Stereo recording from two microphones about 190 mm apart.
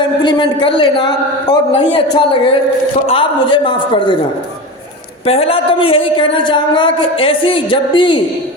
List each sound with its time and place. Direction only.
0.0 s a woman's voice: 25° left (ahead or behind)
5.2 s a woman's voice: 30° left (ahead or behind)